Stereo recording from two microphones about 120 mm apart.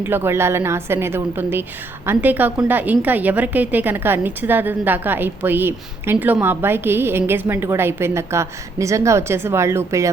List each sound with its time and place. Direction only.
0.0 s a woman's voice: 20° right (ahead or behind)